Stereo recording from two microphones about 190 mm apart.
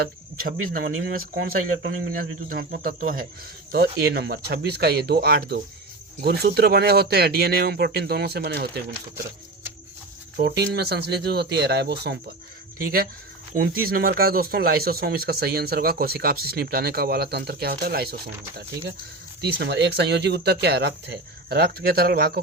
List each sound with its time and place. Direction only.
0.3 s speech: 50° right (ahead or behind)
10.4 s speech: 60° right (ahead or behind)
13.6 s speech: 50° right (ahead or behind)